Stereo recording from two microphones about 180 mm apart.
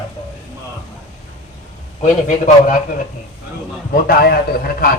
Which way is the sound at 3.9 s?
55° left (ahead or behind).